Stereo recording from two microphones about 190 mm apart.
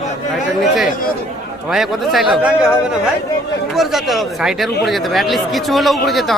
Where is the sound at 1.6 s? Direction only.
Centre (ahead or behind).